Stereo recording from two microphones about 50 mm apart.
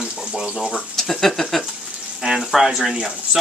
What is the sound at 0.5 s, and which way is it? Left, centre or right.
Speech, centre.